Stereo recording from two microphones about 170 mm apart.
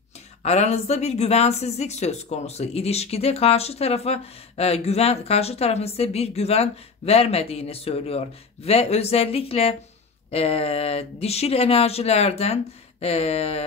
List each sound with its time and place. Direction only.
0.4 s speech: 40° left (ahead or behind)